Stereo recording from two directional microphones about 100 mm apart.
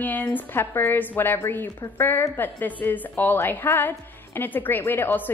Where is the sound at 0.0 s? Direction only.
15° left (ahead or behind).